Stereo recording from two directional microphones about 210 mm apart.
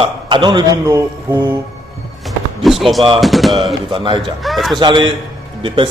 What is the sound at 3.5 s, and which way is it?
Speech, 25° right (ahead or behind).